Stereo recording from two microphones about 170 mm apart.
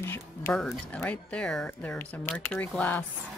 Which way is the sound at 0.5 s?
5° left (ahead or behind).